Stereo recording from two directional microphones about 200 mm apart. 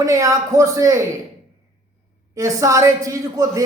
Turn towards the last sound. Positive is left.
turn(degrees=-15)  # may be behind; listen again after turning